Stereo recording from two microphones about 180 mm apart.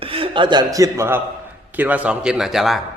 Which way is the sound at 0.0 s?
30° right (ahead or behind).